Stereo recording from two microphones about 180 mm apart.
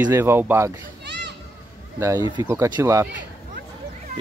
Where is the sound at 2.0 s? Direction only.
15° right (ahead or behind).